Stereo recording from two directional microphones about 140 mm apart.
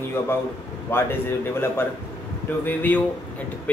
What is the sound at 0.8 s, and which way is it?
Speech, 15° left (ahead or behind).